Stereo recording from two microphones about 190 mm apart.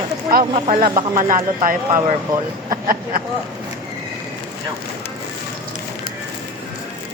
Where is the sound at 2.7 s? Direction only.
50° right (ahead or behind).